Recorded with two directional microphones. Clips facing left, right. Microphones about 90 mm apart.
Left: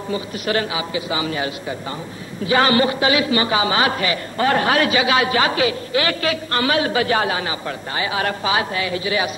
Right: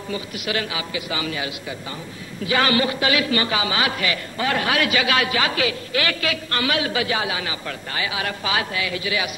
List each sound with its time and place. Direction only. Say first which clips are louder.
0.1 s a man's voice: left 5 dB; 30° left (ahead or behind)
7.6 s a man's voice: left 3 dB; 30° left (ahead or behind)
8.5 s a man's voice: left 4 dB; 30° left (ahead or behind)